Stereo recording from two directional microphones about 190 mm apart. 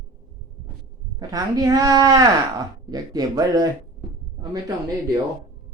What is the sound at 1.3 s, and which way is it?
Speech, 20° right (ahead or behind).